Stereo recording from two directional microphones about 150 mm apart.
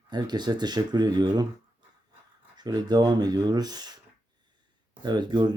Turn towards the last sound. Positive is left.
turn(degrees=-30)  # may be behind; listen again after turning